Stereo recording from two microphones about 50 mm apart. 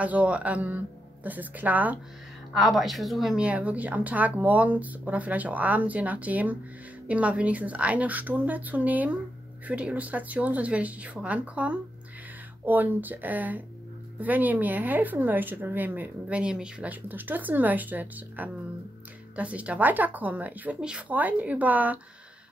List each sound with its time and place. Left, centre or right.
0.0 s a woman's voice: right
2.5 s speech: centre
3.3 s a woman's voice: right
16.3 s speech: centre
16.8 s speech: right